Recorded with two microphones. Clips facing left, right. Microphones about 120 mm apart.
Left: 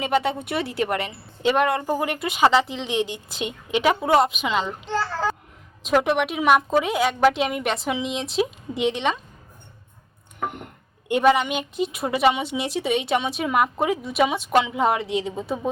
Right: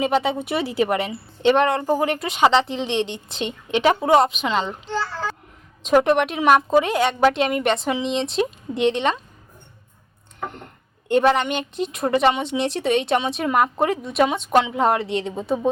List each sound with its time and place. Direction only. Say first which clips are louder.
0.0 s a woman's voice: right 2 dB; centre (ahead or behind)
5.8 s a woman's voice: right 4 dB; 5° left (ahead or behind)
11.1 s a woman's voice: right 1 dB; 5° left (ahead or behind)